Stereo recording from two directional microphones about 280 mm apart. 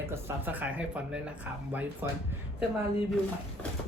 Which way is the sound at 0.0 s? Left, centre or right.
Centre.